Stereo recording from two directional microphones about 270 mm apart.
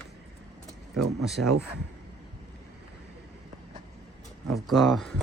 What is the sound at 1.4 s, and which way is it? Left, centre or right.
Speech, right.